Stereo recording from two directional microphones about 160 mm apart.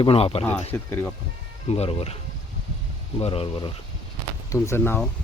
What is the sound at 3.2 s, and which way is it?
Speech, 35° left (ahead or behind).